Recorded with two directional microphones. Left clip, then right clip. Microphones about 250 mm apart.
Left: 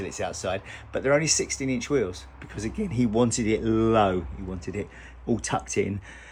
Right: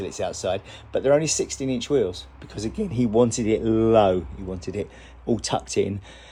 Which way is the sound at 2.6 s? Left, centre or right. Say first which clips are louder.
Right 3 dB; centre.